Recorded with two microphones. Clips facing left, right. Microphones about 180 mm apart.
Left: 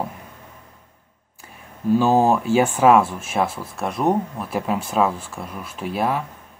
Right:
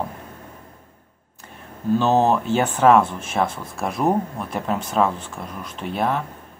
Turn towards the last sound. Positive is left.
turn(degrees=5)  # may be behind; listen again after turning